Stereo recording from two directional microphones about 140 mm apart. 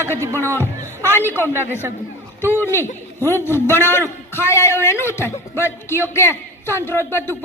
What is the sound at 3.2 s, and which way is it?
A man's voice, 15° left (ahead or behind).